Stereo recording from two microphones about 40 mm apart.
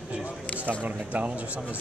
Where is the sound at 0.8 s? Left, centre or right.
Right.